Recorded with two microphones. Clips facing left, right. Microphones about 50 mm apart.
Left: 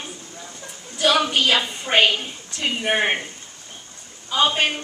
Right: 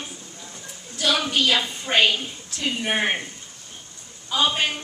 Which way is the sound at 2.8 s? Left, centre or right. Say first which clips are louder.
Left 3 dB; centre.